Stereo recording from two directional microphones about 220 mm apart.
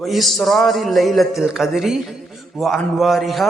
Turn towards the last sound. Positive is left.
turn(degrees=0)  # may be behind; listen again after turning